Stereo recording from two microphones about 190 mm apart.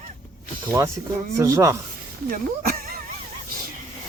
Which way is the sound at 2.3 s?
50° right (ahead or behind).